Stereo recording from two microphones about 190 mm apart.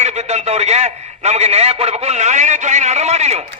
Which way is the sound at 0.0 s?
35° right (ahead or behind).